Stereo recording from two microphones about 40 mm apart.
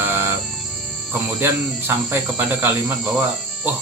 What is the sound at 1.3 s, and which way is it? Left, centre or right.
Speech, right.